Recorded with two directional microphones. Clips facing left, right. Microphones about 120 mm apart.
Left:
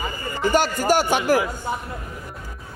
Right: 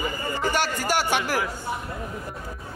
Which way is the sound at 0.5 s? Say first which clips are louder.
Left 8 dB; 45° left (ahead or behind).